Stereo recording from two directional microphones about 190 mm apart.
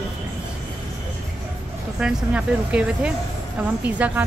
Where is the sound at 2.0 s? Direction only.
5° right (ahead or behind).